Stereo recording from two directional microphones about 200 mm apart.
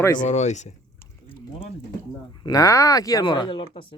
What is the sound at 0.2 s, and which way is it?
Speech, 35° left (ahead or behind).